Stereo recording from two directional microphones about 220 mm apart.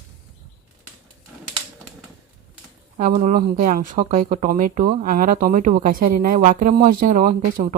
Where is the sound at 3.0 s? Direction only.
35° right (ahead or behind).